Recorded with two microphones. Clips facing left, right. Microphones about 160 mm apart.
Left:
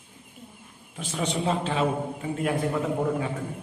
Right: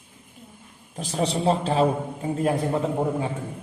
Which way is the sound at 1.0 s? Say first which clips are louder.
Right 3 dB; 35° right (ahead or behind).